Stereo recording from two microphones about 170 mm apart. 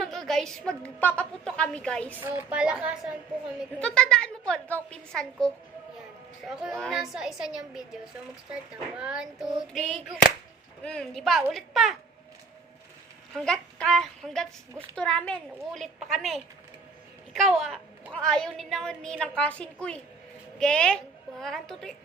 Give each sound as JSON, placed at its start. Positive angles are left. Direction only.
{"t": 0.0, "sound": "a woman's voice", "side_deg": 0}
{"t": 2.2, "sound": "a woman's voice", "side_deg": -10}
{"t": 3.8, "sound": "a woman's voice", "side_deg": 5}
{"t": 6.5, "sound": "a woman's voice", "side_deg": 0}
{"t": 9.0, "sound": "a woman's voice", "side_deg": -5}
{"t": 13.3, "sound": "a woman's voice", "side_deg": 5}